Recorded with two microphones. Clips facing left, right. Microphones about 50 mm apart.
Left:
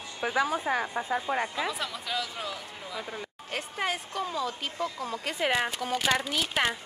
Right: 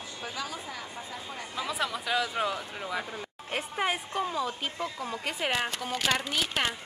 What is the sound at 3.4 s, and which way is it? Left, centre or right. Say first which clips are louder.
A woman's voice: right 2 dB; centre.